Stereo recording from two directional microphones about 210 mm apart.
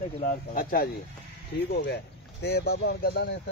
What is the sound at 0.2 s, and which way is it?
Speech, 40° left (ahead or behind).